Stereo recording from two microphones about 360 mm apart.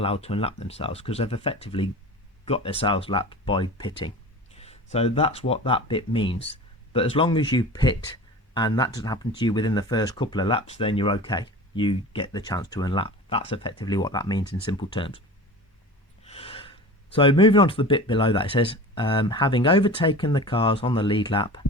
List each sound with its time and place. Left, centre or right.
0.0 s speech: centre
16.2 s speech: centre